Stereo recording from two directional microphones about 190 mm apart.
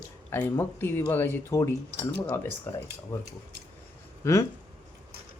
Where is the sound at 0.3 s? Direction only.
10° left (ahead or behind).